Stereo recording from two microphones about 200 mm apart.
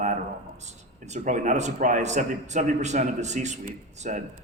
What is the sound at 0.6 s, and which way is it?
A man's voice, 35° right (ahead or behind).